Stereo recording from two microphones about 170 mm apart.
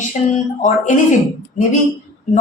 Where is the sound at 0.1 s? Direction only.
45° left (ahead or behind).